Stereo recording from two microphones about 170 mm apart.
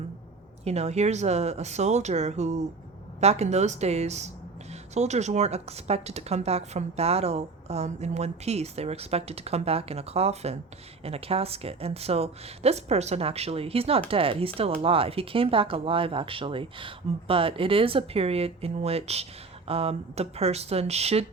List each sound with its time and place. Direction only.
0.6 s speech: 40° right (ahead or behind)